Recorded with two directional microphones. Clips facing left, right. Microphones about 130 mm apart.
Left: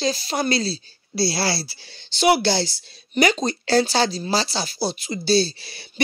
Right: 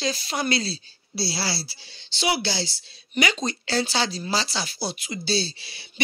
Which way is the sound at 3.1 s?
40° left (ahead or behind).